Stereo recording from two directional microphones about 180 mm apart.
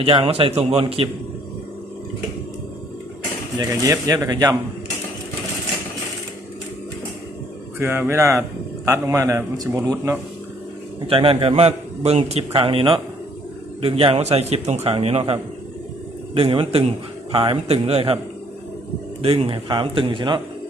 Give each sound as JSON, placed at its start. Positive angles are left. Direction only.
{"t": 0.0, "sound": "a man's voice", "side_deg": -30}
{"t": 3.6, "sound": "speech", "side_deg": -20}
{"t": 7.8, "sound": "a man's voice", "side_deg": -15}
{"t": 11.0, "sound": "a man's voice", "side_deg": -30}
{"t": 19.2, "sound": "speech", "side_deg": -30}